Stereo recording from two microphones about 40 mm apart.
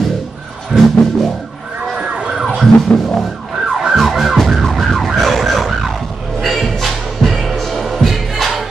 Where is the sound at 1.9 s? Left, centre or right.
Centre.